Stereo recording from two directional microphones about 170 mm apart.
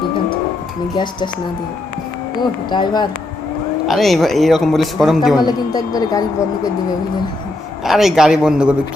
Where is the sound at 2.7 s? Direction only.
25° left (ahead or behind).